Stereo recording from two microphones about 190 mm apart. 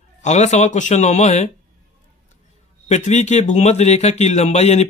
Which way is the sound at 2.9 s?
35° left (ahead or behind).